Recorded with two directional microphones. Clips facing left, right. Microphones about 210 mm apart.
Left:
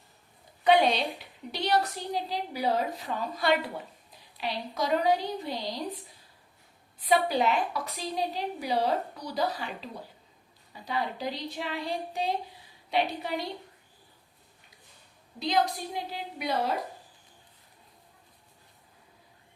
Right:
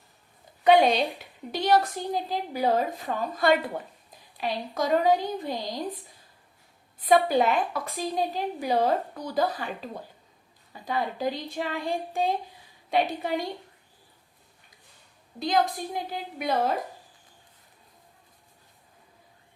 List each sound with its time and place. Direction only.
0.6 s a sound: 45° right (ahead or behind)
1.5 s a woman's voice: 50° right (ahead or behind)
7.0 s a woman's voice: 50° right (ahead or behind)
15.4 s a woman's voice: 50° right (ahead or behind)